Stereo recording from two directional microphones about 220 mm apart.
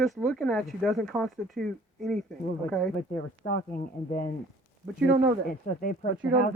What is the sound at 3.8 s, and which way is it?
Speech, 40° left (ahead or behind).